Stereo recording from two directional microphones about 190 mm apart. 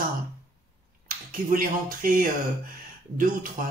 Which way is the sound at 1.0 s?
45° right (ahead or behind).